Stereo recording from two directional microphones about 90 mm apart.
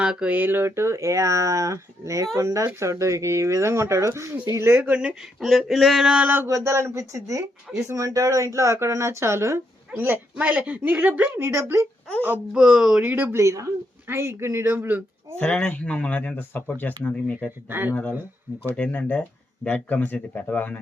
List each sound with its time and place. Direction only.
0.0 s speech: 10° right (ahead or behind)
5.4 s a sound: centre (ahead or behind)
6.2 s speech: 25° right (ahead or behind)
10.3 s speech: 15° right (ahead or behind)
12.5 s speech: 10° right (ahead or behind)
13.0 s speech: 20° right (ahead or behind)
13.4 s speech: 35° right (ahead or behind)
15.4 s speech: 15° left (ahead or behind)
17.7 s speech: 25° right (ahead or behind)
18.9 s speech: 15° left (ahead or behind)